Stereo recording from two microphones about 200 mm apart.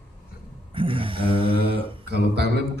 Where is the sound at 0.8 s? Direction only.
25° right (ahead or behind).